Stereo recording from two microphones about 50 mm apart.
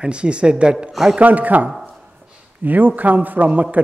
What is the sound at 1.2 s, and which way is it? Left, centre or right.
A man's voice, right.